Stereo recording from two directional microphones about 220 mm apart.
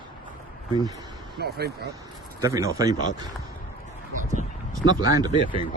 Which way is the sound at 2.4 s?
15° right (ahead or behind).